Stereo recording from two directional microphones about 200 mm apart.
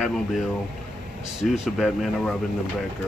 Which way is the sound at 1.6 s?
Centre (ahead or behind).